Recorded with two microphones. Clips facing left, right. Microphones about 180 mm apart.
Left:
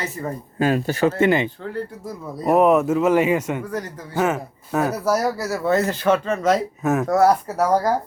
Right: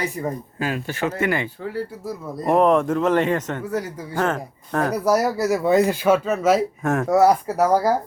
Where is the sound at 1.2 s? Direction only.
20° left (ahead or behind).